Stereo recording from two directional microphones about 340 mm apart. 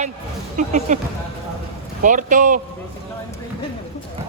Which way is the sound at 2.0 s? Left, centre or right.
Right.